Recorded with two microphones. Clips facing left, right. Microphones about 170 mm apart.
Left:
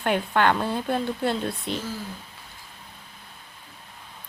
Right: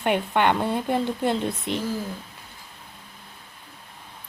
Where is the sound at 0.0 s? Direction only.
20° right (ahead or behind).